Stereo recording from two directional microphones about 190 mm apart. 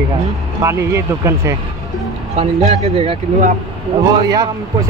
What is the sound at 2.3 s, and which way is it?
Speech, 35° right (ahead or behind).